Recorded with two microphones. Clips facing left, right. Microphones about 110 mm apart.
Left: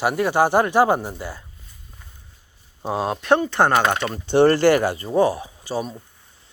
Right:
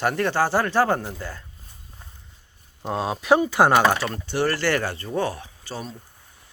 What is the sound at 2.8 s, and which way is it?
Speech, 5° left (ahead or behind).